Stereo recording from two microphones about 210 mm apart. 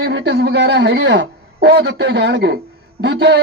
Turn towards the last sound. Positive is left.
turn(degrees=-60)  # may be behind; listen again after turning